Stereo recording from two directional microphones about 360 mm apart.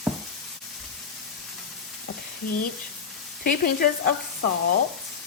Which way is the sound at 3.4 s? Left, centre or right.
Left.